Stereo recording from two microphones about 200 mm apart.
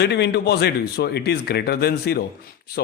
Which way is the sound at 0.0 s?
55° left (ahead or behind).